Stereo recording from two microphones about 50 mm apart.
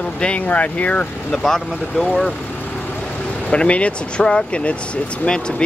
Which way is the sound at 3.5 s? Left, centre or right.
Left.